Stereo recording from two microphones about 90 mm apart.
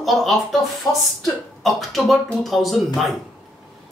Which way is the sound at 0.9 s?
45° left (ahead or behind).